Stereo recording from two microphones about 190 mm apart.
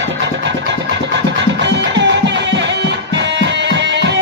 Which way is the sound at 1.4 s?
70° right (ahead or behind).